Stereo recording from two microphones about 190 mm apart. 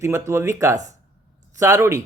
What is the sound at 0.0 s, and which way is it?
Speech, 15° right (ahead or behind).